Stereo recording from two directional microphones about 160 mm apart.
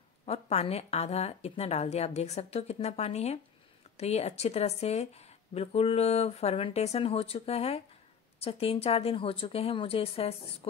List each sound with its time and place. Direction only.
0.2 s a woman's voice: 40° left (ahead or behind)